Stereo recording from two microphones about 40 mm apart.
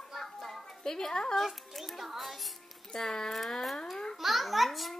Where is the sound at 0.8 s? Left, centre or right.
Centre.